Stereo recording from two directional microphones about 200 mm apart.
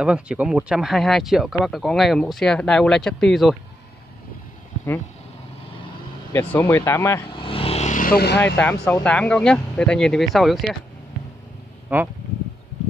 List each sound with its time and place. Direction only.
0.0 s speech: 5° right (ahead or behind)
6.3 s speech: 15° left (ahead or behind)
7.3 s vehicle: 25° left (ahead or behind); by 8.4 s 50° left (ahead or behind)
8.5 s speech: 10° left (ahead or behind)
11.9 s speech: 10° right (ahead or behind)